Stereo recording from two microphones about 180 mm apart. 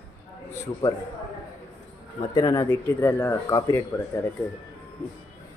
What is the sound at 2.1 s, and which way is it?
Speech, 20° left (ahead or behind).